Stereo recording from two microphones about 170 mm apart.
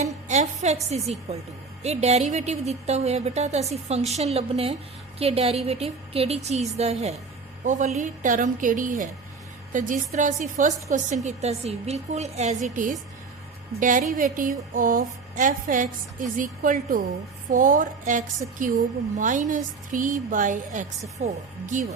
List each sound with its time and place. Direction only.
0.0 s music: 40° right (ahead or behind)
0.9 s a woman's voice: 40° right (ahead or behind)